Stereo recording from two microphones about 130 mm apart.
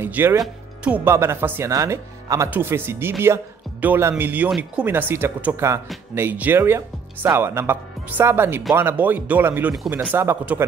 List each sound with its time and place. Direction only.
0.0 s speech: 15° right (ahead or behind)
1.0 s speech: 20° right (ahead or behind)